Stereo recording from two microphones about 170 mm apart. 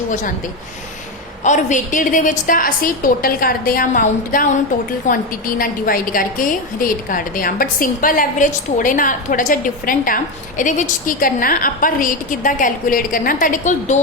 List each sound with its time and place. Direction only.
1.5 s a woman's voice: 45° left (ahead or behind)